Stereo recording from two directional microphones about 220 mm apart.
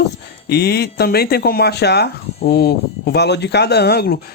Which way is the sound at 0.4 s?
45° left (ahead or behind).